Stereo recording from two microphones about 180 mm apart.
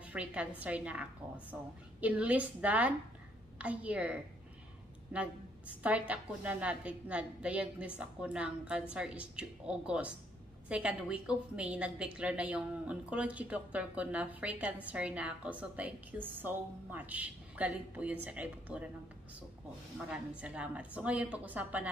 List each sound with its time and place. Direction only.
0.0 s a woman's voice: 5° right (ahead or behind)
5.1 s a woman's voice: 5° right (ahead or behind)
20.1 s a woman's voice: 5° right (ahead or behind)